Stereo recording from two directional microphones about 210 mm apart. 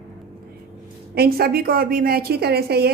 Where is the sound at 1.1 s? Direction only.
50° right (ahead or behind).